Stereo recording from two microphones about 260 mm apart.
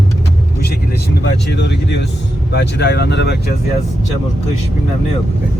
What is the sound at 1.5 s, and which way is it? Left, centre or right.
Speech, left.